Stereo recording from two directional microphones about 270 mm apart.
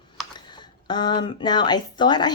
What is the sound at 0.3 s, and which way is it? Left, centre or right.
Speech, centre.